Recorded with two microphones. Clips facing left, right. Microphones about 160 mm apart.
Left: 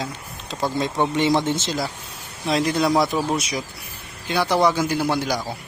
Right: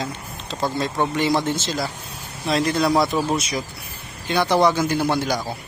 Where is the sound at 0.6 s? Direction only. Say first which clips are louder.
Left 1 dB; 15° left (ahead or behind).